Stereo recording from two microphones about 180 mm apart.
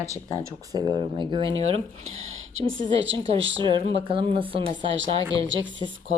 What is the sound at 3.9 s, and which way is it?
Speech, 30° right (ahead or behind).